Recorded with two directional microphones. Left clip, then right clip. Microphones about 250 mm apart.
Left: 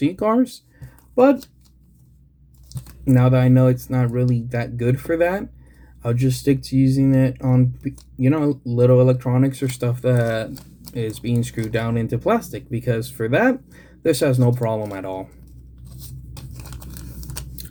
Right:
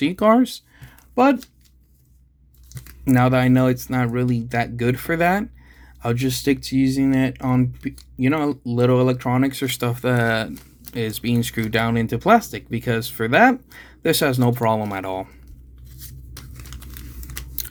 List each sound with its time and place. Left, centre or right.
0.0 s speech: right
3.0 s speech: right
16.3 s tearing: centre